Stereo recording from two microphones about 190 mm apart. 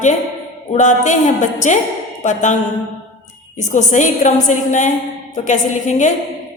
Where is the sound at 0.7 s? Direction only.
40° left (ahead or behind).